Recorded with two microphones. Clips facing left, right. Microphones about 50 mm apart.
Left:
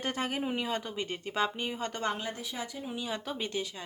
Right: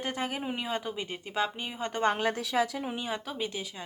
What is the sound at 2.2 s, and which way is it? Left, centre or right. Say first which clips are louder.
Speech: right 9 dB; right.